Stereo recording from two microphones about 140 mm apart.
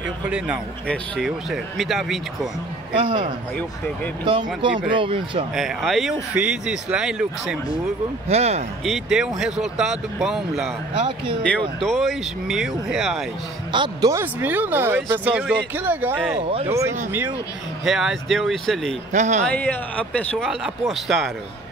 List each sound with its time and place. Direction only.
0.8 s speech: centre (ahead or behind)
4.2 s speech: 35° right (ahead or behind)
5.5 s speech: centre (ahead or behind)
8.3 s speech: 50° right (ahead or behind)
8.8 s speech: centre (ahead or behind)
11.0 s speech: 35° right (ahead or behind)
11.8 s speech: centre (ahead or behind)
13.7 s a man's voice: 35° right (ahead or behind)
14.1 s speech: 15° right (ahead or behind)
16.3 s speech: 40° right (ahead or behind)
16.6 s speech: 20° right (ahead or behind)
17.8 s speech: centre (ahead or behind)
19.1 s speech: 60° right (ahead or behind)
19.4 s speech: 10° left (ahead or behind)